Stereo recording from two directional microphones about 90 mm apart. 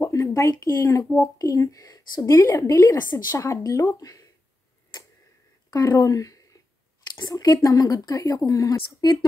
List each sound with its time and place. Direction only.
0.0 s speech: 35° left (ahead or behind)
5.7 s speech: 40° left (ahead or behind)